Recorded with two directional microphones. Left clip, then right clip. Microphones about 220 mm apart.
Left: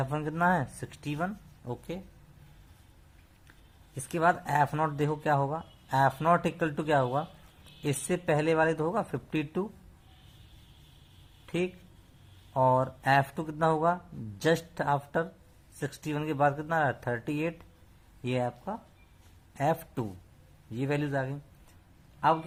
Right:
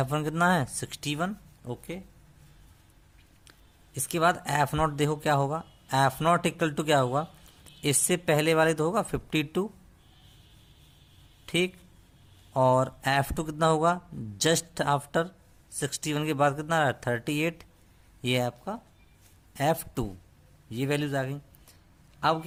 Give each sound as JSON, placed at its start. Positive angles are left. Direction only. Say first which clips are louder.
{"t": 0.0, "sound": "speech", "louder": "right 3 dB", "side_deg": -55}
{"t": 1.9, "sound": "speech", "louder": "even", "side_deg": -30}
{"t": 4.1, "sound": "speech", "louder": "right 1 dB", "side_deg": -45}
{"t": 11.4, "sound": "speech", "louder": "right 5 dB", "side_deg": -50}